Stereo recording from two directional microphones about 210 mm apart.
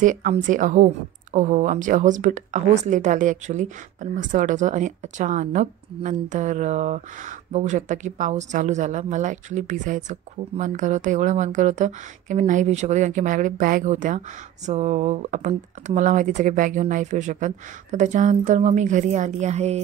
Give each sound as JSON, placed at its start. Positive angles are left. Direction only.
{"t": 0.0, "sound": "speech", "side_deg": -40}